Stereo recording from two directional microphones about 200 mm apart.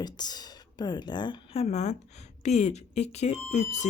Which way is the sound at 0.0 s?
20° left (ahead or behind).